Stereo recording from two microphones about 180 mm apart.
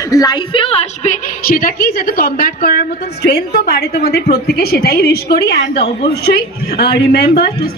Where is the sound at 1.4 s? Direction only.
55° left (ahead or behind).